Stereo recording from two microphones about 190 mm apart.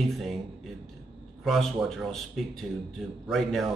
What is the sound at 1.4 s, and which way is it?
Speech, centre (ahead or behind).